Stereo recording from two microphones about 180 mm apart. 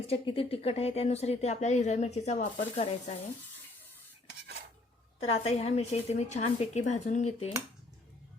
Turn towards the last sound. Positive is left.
turn(degrees=40)  # may be behind; listen again after turning